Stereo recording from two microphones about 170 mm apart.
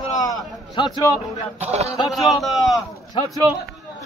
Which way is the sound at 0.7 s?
25° left (ahead or behind).